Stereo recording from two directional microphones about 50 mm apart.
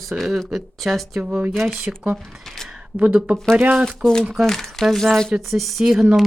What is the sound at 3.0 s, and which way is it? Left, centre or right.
Speech, right.